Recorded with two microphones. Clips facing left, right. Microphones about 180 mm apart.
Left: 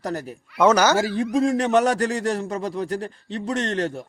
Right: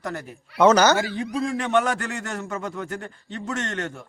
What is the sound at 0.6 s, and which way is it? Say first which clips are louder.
Speech: right 1 dB; 10° left (ahead or behind).